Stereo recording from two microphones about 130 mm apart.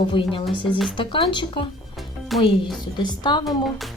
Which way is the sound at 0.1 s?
40° left (ahead or behind).